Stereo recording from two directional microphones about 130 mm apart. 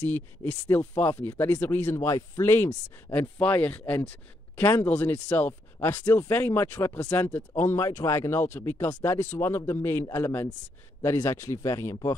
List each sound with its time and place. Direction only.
0.1 s speech: 15° left (ahead or behind)